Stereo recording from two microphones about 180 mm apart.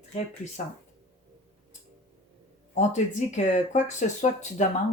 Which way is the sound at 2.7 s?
40° left (ahead or behind).